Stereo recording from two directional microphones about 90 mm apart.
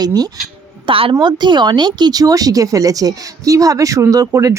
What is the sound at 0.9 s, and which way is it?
Speech, 85° right.